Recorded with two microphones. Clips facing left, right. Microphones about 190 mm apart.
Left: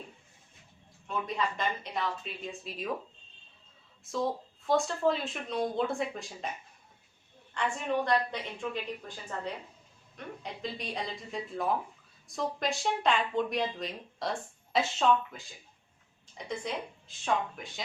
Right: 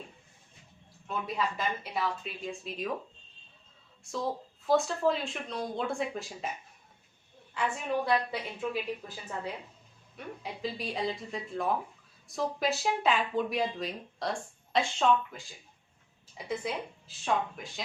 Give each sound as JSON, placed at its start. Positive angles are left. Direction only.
{"t": 1.5, "sound": "speech", "side_deg": -5}
{"t": 4.0, "sound": "speech", "side_deg": 0}
{"t": 7.6, "sound": "a woman's voice", "side_deg": -5}
{"t": 16.5, "sound": "speech", "side_deg": -5}